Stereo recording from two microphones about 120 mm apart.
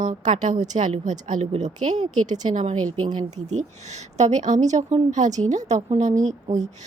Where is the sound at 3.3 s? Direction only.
70° right (ahead or behind).